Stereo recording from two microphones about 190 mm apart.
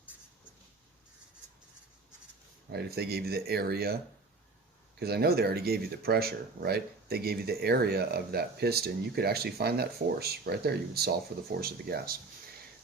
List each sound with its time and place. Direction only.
2.7 s speech: 55° right (ahead or behind)
4.9 s speech: 55° right (ahead or behind)